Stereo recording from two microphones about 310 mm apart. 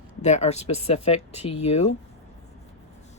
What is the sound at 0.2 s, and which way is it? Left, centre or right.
Speech, left.